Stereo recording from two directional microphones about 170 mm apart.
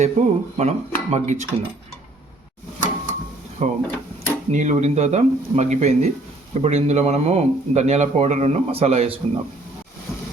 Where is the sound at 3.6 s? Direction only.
45° right (ahead or behind).